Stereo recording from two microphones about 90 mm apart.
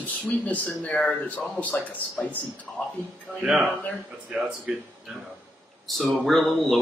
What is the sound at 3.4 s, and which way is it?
Speech, 5° right (ahead or behind).